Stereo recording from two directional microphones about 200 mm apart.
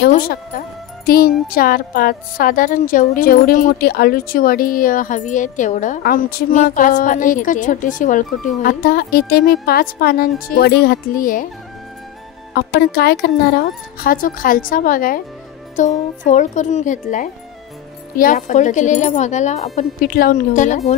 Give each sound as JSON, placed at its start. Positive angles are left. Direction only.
{"t": 0.1, "sound": "music", "side_deg": 50}
{"t": 12.5, "sound": "music", "side_deg": 50}
{"t": 15.7, "sound": "speech", "side_deg": 40}
{"t": 20.1, "sound": "music", "side_deg": 45}